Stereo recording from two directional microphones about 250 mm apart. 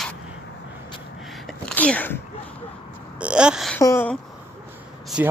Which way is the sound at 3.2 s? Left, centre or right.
Centre.